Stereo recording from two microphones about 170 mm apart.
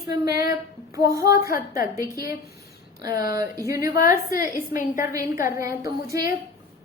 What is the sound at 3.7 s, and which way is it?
Speech, 20° right (ahead or behind).